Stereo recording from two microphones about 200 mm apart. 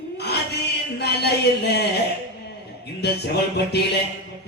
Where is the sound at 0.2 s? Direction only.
55° left (ahead or behind).